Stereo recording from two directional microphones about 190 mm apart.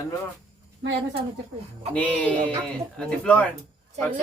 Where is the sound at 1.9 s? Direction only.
5° left (ahead or behind).